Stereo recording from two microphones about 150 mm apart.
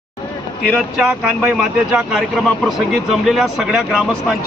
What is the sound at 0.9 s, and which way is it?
Speech, 5° right (ahead or behind).